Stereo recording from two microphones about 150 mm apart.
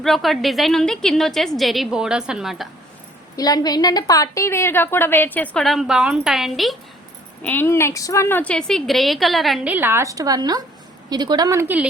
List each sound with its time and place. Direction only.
0.0 s a woman's voice: centre (ahead or behind)
3.3 s a woman's voice: 25° left (ahead or behind); by 6.7 s centre (ahead or behind)
7.4 s a woman's voice: 15° left (ahead or behind)
9.6 s a woman's voice: 15° right (ahead or behind)
11.6 s a woman's voice: 10° right (ahead or behind)